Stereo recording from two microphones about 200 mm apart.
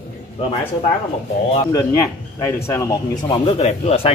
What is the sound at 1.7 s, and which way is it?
Speech, 15° left (ahead or behind).